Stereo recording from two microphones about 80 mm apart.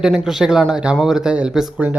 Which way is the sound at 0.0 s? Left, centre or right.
Centre.